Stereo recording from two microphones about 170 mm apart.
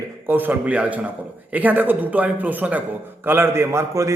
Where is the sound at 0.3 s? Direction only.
10° right (ahead or behind).